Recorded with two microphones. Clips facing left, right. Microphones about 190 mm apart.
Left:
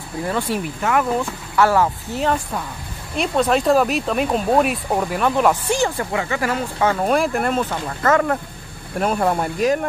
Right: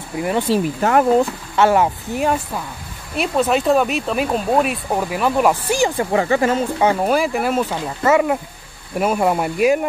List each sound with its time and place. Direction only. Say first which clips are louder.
0.2 s speech: right 3 dB; 15° right (ahead or behind)
0.5 s speech: right 5 dB; 35° right (ahead or behind)
1.6 s speech: right 2 dB; 20° right (ahead or behind)
6.1 s speech: right 6 dB; 30° right (ahead or behind)
6.5 s speech: right 3 dB; 20° right (ahead or behind)
7.1 s speech: right 1 dB; centre (ahead or behind)